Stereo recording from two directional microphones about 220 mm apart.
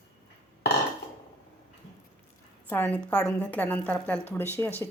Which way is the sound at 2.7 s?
10° left (ahead or behind).